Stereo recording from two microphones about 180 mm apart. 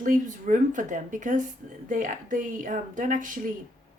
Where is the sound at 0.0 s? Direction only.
45° right (ahead or behind).